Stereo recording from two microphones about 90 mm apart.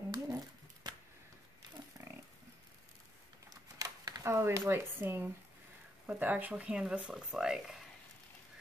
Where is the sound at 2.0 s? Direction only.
40° right (ahead or behind).